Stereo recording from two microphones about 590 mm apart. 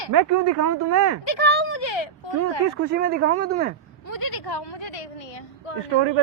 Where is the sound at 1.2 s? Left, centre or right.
Left.